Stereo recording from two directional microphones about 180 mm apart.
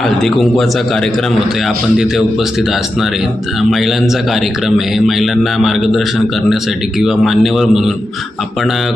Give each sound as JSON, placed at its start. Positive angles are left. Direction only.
{"t": 0.2, "sound": "a man's voice", "side_deg": 0}
{"t": 1.6, "sound": "a man's voice", "side_deg": 0}
{"t": 5.0, "sound": "a man's voice", "side_deg": 0}